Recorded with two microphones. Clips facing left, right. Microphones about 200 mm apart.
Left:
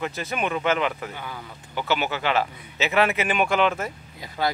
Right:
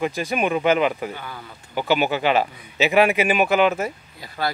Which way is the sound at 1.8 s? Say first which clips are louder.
Right 5 dB; 15° right (ahead or behind).